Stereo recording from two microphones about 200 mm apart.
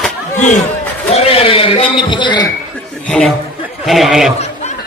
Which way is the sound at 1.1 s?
30° left (ahead or behind).